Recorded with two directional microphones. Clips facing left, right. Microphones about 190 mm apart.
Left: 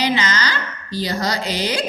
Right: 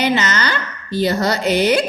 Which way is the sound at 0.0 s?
55° right (ahead or behind).